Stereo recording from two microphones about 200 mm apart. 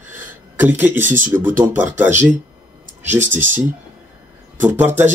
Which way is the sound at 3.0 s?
10° right (ahead or behind).